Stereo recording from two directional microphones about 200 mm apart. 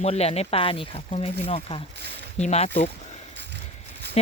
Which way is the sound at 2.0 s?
55° right (ahead or behind).